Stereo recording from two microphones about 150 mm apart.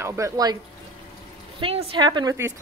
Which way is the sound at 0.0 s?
20° right (ahead or behind).